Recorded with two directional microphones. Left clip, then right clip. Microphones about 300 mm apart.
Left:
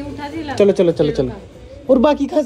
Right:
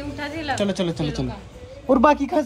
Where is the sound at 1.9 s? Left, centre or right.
Centre.